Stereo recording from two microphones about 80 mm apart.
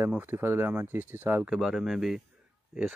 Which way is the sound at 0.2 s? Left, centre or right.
Right.